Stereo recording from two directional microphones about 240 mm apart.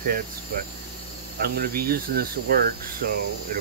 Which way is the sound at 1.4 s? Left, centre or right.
Right.